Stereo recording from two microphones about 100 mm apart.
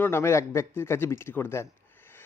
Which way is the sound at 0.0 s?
25° left (ahead or behind).